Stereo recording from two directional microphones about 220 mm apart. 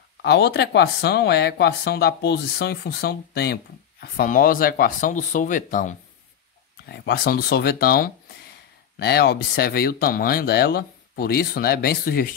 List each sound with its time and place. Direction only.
0.2 s speech: 50° left (ahead or behind)